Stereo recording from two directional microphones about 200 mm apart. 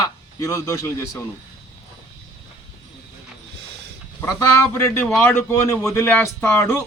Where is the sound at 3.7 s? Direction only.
55° right (ahead or behind).